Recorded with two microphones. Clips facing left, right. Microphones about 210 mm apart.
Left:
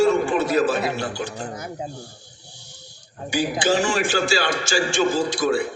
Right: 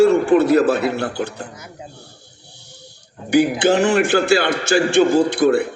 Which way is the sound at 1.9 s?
60° right (ahead or behind).